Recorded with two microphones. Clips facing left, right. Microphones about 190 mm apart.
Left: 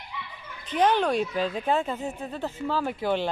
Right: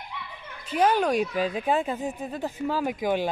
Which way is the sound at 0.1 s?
60° right (ahead or behind).